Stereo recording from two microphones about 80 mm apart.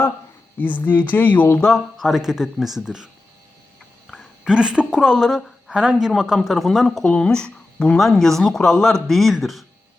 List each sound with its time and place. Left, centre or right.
0.6 s speech: left
1.6 s speech: centre
4.1 s speech: centre
7.0 s speech: centre